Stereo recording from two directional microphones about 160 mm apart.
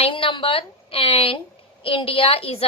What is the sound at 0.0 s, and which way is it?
A woman's voice, 35° left (ahead or behind).